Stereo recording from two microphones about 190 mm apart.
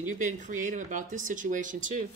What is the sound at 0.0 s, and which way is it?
Speech, 40° right (ahead or behind).